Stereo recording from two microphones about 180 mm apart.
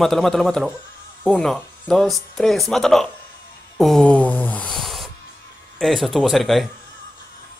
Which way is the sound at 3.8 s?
Centre (ahead or behind).